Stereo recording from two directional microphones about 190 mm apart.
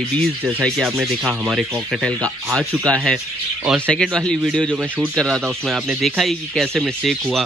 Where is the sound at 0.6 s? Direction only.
Centre (ahead or behind).